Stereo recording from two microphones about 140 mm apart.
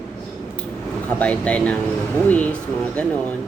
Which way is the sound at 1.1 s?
10° left (ahead or behind).